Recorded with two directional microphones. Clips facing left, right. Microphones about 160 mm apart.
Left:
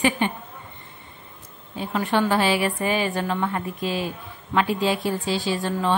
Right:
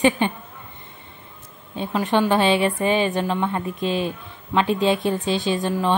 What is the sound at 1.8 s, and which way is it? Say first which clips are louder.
Speech: right 2 dB; 20° right (ahead or behind).